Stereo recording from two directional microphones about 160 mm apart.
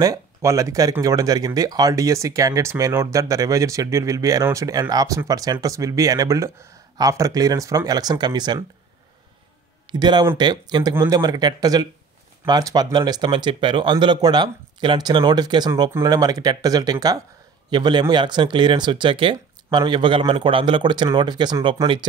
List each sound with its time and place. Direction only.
0.0 s speech: 20° right (ahead or behind)
9.8 s speech: 25° right (ahead or behind)